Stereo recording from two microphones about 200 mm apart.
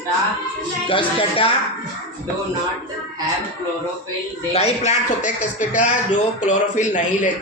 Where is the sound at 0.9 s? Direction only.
25° left (ahead or behind).